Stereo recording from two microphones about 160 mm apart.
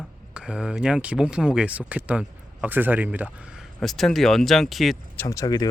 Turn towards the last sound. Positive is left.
turn(degrees=25)  # may be behind; listen again after turning